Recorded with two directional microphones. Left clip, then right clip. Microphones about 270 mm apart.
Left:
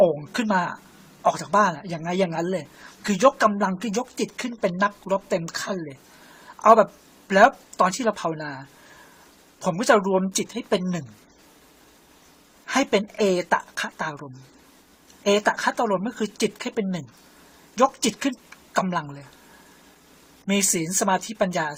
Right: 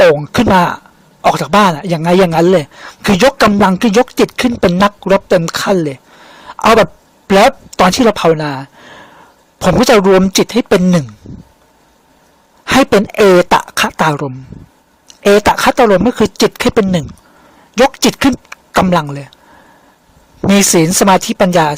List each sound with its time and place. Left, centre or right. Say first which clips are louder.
0.2 s a man's voice: right 14 dB; right
6.5 s a sound: right 17 dB; right
7.9 s a man's voice: right 15 dB; right
12.6 s a man's voice: right 13 dB; right
20.5 s a man's voice: right 14 dB; right